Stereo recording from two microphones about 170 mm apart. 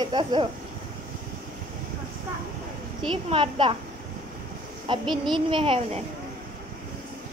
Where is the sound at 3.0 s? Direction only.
30° right (ahead or behind).